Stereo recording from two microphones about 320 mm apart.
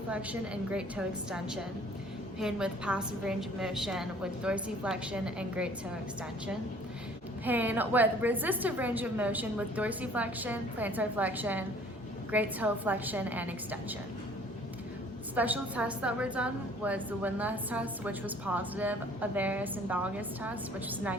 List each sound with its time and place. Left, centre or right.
0.1 s a woman's voice: centre
7.4 s a woman's voice: centre
15.4 s a woman's voice: centre